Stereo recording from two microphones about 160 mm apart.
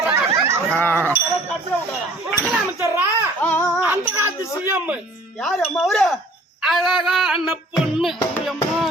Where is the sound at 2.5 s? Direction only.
5° right (ahead or behind).